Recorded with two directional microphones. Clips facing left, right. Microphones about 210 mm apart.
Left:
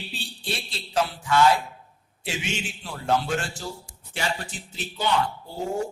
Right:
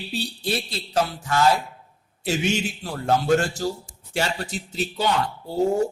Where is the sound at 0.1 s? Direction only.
40° right (ahead or behind).